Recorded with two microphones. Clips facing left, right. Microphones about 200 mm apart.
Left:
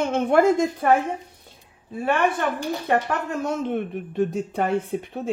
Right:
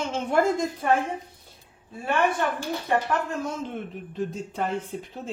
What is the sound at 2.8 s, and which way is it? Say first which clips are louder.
Speech: left 1 dB; 65° left (ahead or behind).